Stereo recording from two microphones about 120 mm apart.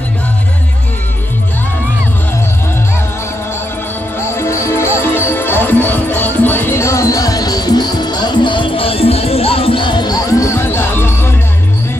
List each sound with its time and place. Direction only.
4.4 s music: 25° left (ahead or behind)